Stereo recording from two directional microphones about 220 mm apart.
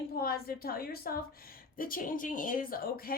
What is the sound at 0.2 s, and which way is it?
Speech, 45° left (ahead or behind).